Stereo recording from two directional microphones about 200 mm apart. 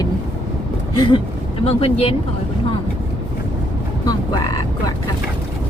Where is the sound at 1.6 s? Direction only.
30° left (ahead or behind).